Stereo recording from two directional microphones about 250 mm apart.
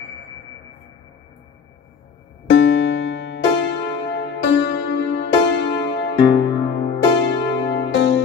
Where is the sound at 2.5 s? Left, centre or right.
Left.